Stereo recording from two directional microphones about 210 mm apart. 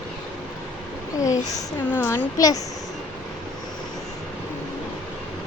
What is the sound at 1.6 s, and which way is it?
Speech, 10° left (ahead or behind).